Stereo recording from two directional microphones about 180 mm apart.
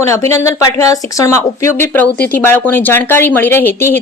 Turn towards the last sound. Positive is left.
turn(degrees=10)  # may be behind; listen again after turning